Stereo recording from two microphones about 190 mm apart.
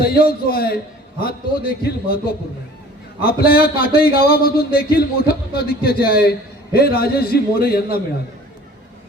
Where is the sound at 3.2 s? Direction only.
50° left (ahead or behind).